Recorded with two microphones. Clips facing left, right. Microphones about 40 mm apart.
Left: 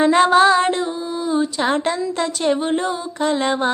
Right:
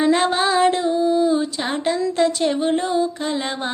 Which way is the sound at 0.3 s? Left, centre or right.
Left.